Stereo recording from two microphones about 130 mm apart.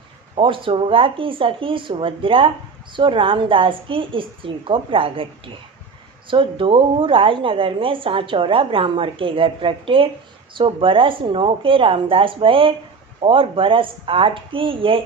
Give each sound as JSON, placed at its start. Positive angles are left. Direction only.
{"t": 0.3, "sound": "a woman's voice", "side_deg": -40}